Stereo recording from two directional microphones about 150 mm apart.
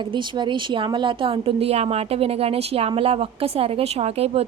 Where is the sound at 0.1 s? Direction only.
30° right (ahead or behind).